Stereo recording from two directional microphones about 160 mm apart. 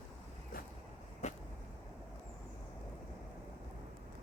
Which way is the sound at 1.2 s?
45° left (ahead or behind).